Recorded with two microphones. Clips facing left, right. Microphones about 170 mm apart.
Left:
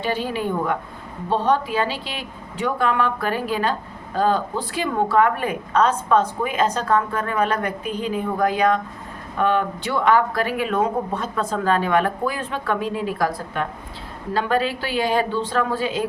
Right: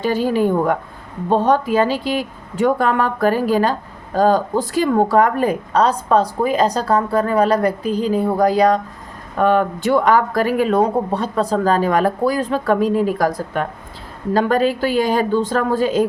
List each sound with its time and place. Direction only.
0.0 s a woman's voice: 45° right (ahead or behind)